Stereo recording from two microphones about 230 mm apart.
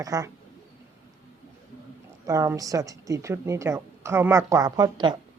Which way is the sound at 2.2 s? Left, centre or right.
Centre.